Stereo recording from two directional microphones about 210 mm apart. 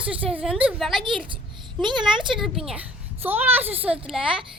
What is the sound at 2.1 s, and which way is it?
Speech, 25° right (ahead or behind).